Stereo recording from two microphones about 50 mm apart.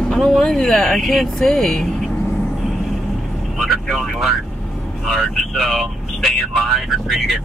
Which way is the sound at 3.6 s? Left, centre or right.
Centre.